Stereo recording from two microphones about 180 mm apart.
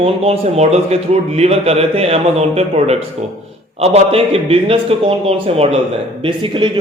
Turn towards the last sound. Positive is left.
turn(degrees=-25)  # may be behind; listen again after turning